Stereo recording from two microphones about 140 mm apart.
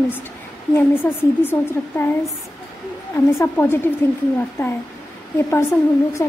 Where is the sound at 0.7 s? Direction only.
15° left (ahead or behind).